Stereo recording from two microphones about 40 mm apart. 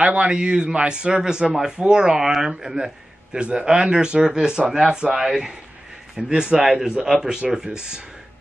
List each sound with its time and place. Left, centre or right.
0.0 s a man's voice: right